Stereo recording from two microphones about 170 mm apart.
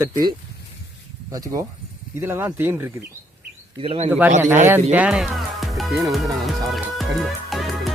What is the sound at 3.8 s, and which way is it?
Speech, 35° right (ahead or behind).